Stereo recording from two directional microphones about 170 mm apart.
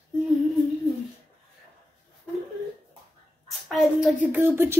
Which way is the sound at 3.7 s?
5° right (ahead or behind).